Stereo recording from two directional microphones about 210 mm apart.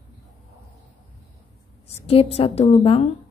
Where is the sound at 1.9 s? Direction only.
30° left (ahead or behind).